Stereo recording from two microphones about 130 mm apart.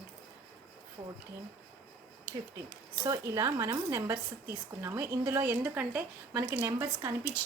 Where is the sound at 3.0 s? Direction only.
25° right (ahead or behind).